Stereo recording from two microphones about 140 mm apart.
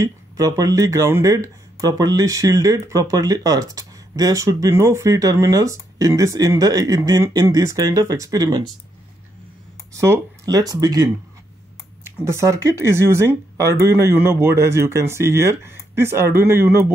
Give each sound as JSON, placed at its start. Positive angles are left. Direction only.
{"t": 0.0, "sound": "speech", "side_deg": -25}
{"t": 9.9, "sound": "speech", "side_deg": -20}
{"t": 12.3, "sound": "speech", "side_deg": -20}